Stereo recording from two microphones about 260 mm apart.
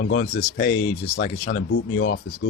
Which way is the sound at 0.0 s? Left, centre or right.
Left.